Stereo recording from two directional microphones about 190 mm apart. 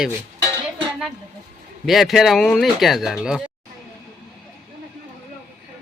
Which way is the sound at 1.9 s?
Centre (ahead or behind).